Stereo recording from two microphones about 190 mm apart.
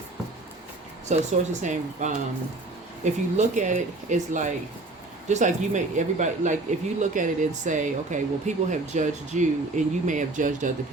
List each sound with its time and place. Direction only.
1.1 s speech: 40° right (ahead or behind)